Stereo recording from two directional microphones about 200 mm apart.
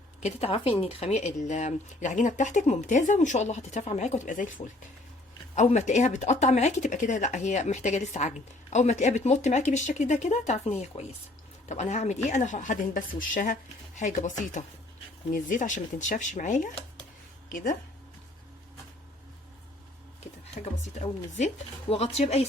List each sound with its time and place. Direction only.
0.2 s speech: 30° left (ahead or behind)
20.6 s speech: 35° left (ahead or behind)